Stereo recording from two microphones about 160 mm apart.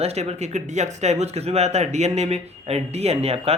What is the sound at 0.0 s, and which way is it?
Speech, 40° right (ahead or behind).